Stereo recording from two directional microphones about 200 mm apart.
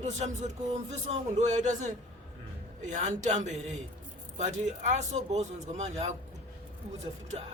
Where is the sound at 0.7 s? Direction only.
35° right (ahead or behind).